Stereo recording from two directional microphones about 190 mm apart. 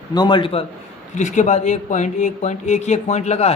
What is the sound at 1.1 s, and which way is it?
Speech, 40° left (ahead or behind).